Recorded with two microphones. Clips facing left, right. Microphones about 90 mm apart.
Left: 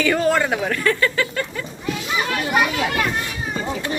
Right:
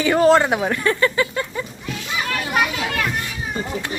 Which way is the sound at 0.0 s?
20° right (ahead or behind).